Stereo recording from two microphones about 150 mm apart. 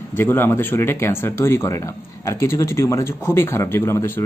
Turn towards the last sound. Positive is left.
turn(degrees=15)  # may be behind; listen again after turning